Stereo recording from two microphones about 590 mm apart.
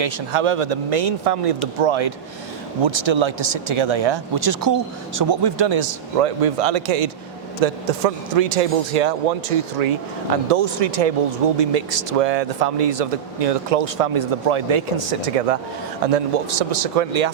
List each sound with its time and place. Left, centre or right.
0.0 s speech: right
7.6 s speech: right
10.5 s speech: right